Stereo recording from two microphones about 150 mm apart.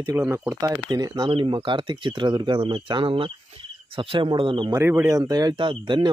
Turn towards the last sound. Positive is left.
turn(degrees=-30)  # may be behind; listen again after turning